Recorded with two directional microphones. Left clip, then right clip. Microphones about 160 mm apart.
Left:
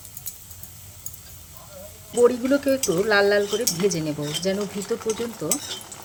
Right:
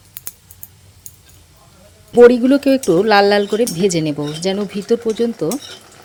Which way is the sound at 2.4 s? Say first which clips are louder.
Right 7 dB; 50° right (ahead or behind).